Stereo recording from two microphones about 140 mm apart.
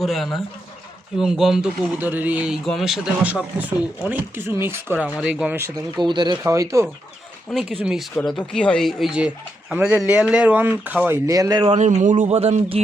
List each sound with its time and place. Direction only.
0.0 s speech: centre (ahead or behind)
2.0 s speech: 15° right (ahead or behind)
6.0 s speech: 30° right (ahead or behind)
6.4 s speech: 20° right (ahead or behind)
7.5 s speech: centre (ahead or behind)
8.1 s speech: 5° left (ahead or behind); by 11.2 s 10° right (ahead or behind)
11.3 s speech: 25° right (ahead or behind)
11.7 s speech: 55° right (ahead or behind)
12.2 s speech: 50° right (ahead or behind)